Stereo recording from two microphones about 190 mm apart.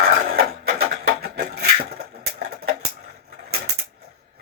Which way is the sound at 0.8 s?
55° right (ahead or behind).